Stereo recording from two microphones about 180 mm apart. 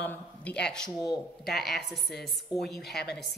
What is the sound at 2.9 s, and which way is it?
Speech, 65° left (ahead or behind).